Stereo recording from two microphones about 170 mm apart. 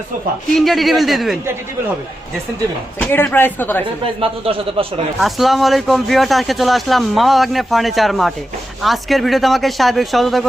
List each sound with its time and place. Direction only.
0.5 s speech: centre (ahead or behind)
3.0 s speech: 10° left (ahead or behind)
4.0 s a man's voice: 30° right (ahead or behind)
5.2 s speech: centre (ahead or behind)